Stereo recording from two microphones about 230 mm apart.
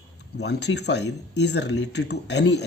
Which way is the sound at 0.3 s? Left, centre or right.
Left.